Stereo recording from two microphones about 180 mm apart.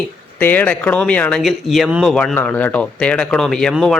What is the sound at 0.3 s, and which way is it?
Speech, 10° left (ahead or behind).